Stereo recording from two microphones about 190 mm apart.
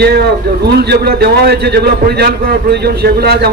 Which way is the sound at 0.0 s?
55° right (ahead or behind).